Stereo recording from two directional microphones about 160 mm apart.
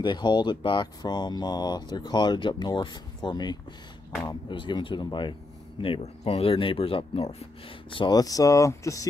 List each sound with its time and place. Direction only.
0.0 s speech: 30° left (ahead or behind)
7.9 s speech: 30° left (ahead or behind)